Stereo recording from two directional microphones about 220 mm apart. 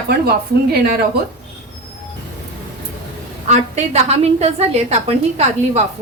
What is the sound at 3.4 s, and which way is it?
A woman's voice, 30° right (ahead or behind).